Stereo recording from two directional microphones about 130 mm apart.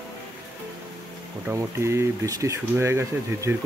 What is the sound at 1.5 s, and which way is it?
Speech, 20° right (ahead or behind).